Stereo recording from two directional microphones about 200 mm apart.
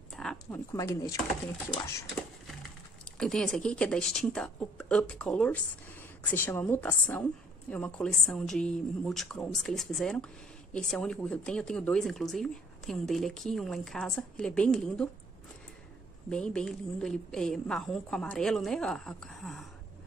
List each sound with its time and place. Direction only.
0.1 s a sound: 5° left (ahead or behind)
0.7 s speech: 15° left (ahead or behind)
3.2 s a woman's voice: 5° left (ahead or behind)
16.3 s a woman's voice: 5° left (ahead or behind)